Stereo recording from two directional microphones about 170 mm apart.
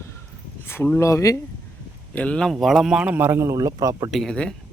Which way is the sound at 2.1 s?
5° left (ahead or behind).